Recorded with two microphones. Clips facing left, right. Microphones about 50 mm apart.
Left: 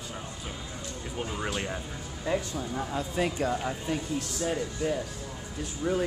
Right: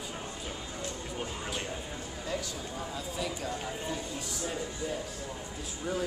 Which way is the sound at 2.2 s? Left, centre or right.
Left.